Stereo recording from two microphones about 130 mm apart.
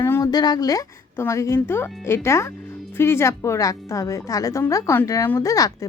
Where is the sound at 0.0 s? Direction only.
20° left (ahead or behind).